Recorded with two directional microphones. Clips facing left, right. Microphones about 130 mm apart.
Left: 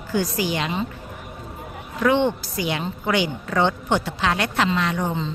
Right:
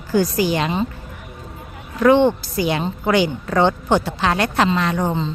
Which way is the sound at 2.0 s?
40° right (ahead or behind).